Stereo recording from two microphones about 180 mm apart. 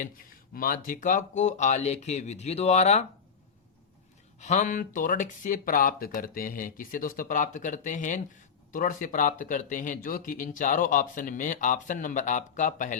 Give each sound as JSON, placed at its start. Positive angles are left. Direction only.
{"t": 0.0, "sound": "speech", "side_deg": 50}
{"t": 4.4, "sound": "speech", "side_deg": 40}